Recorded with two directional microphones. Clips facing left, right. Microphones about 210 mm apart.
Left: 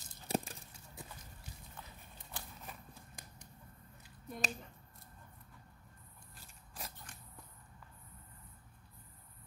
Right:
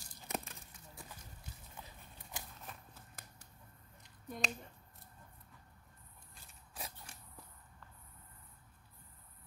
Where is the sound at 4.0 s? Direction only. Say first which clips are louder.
Even; 5° left (ahead or behind).